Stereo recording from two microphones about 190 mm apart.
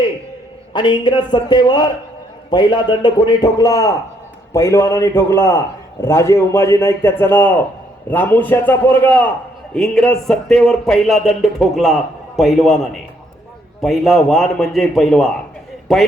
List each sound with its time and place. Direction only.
0.7 s a man's voice: 25° left (ahead or behind); by 16.0 s centre (ahead or behind)